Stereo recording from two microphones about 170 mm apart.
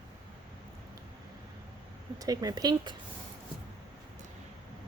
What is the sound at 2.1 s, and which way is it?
Speech, 20° right (ahead or behind).